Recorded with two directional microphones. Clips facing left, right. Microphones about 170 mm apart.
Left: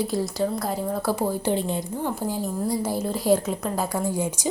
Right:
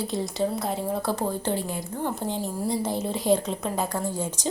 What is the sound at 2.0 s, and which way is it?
A woman's voice, 5° left (ahead or behind).